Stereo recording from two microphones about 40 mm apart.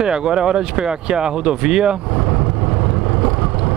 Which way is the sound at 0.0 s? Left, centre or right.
Centre.